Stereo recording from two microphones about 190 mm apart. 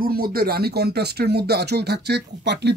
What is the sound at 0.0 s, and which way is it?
Speech, 50° right (ahead or behind).